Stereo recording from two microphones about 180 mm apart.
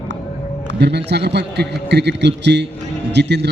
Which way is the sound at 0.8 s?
70° right (ahead or behind).